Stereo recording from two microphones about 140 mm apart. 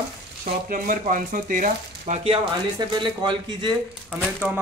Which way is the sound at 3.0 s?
35° right (ahead or behind).